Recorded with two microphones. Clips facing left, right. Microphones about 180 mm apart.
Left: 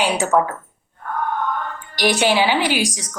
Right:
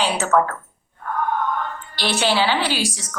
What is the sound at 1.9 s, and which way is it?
A woman's voice, 15° left (ahead or behind).